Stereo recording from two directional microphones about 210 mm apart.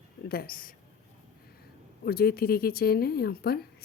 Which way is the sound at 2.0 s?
45° left (ahead or behind).